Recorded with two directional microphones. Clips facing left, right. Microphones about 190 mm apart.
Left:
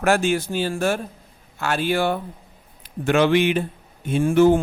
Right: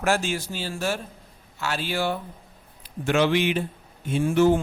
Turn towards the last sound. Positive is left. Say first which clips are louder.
# left 4 dB
turn(degrees=55)  # may be behind; listen again after turning